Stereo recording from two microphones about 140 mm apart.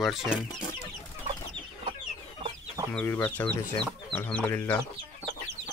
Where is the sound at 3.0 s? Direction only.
15° left (ahead or behind).